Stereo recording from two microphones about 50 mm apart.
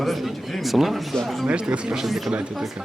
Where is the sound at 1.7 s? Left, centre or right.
Centre.